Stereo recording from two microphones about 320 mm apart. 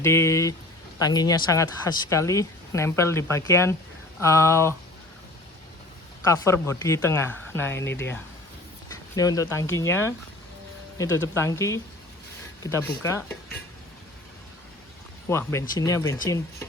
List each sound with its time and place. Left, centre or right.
0.0 s speech: centre
6.2 s speech: centre
7.8 s speech: left
9.1 s speech: centre
15.3 s speech: centre